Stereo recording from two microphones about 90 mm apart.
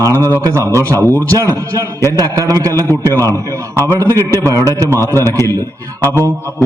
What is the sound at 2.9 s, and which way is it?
Speech, 25° left (ahead or behind).